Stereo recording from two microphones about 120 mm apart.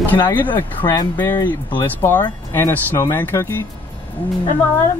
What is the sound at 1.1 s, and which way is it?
Speech, 15° left (ahead or behind).